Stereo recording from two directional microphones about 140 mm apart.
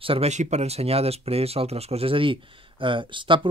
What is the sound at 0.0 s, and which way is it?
A man's voice, 45° right (ahead or behind).